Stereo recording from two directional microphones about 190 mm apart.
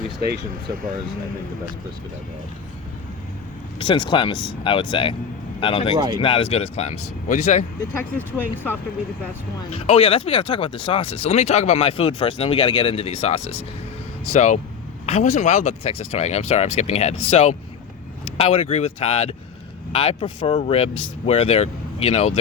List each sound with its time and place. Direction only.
3.8 s speech: 25° left (ahead or behind)
6.0 s speech: 20° right (ahead or behind)
6.2 s speech: 30° left (ahead or behind)
8.4 s speech: 10° left (ahead or behind)
9.7 s speech: 30° left (ahead or behind)